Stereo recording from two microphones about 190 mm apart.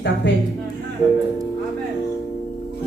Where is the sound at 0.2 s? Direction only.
65° left (ahead or behind).